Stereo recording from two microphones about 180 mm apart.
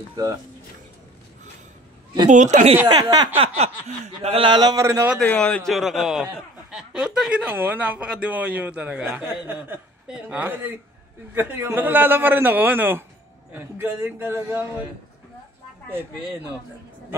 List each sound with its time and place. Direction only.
0.1 s speech: 20° right (ahead or behind)
2.2 s speech: 45° right (ahead or behind)
2.9 s speech: 20° right (ahead or behind)
3.3 s speech: 35° right (ahead or behind); by 5.1 s 15° right (ahead or behind)
5.2 s speech: 5° left (ahead or behind); by 14.7 s 10° right (ahead or behind)